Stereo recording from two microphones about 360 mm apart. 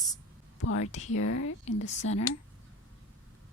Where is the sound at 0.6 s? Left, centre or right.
Left.